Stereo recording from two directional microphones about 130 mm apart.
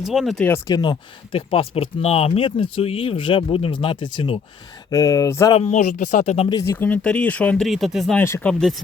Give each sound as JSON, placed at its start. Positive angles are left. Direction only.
{"t": 0.0, "sound": "speech", "side_deg": -5}
{"t": 0.7, "sound": "speech", "side_deg": 35}
{"t": 4.9, "sound": "speech", "side_deg": 25}
{"t": 5.5, "sound": "speech", "side_deg": 55}
{"t": 6.7, "sound": "speech", "side_deg": 15}
{"t": 8.4, "sound": "speech", "side_deg": 10}